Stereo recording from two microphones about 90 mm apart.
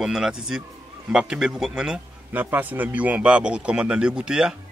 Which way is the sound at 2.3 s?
20° right (ahead or behind).